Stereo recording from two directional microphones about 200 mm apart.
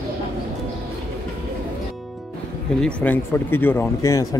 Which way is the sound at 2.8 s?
5° left (ahead or behind).